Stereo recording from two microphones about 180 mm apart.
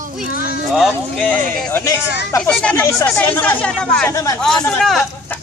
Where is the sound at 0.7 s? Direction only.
Centre (ahead or behind).